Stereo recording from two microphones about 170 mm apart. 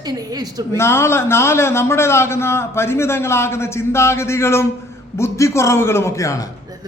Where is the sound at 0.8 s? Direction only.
15° left (ahead or behind).